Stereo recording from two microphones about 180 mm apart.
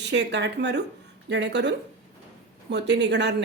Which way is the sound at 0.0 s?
75° right (ahead or behind).